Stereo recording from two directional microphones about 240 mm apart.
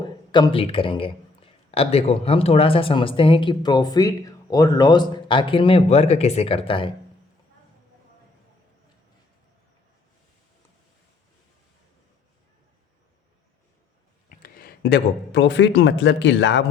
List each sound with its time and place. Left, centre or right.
0.0 s a man's voice: centre
14.3 s speech: left